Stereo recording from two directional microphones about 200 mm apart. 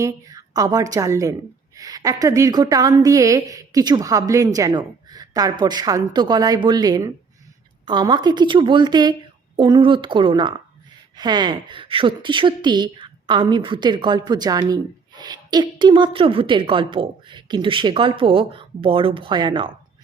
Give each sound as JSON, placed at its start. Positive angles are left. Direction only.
{"t": 0.0, "sound": "a woman's voice", "side_deg": -15}